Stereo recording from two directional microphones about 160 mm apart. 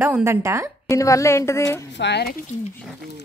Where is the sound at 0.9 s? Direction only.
20° left (ahead or behind).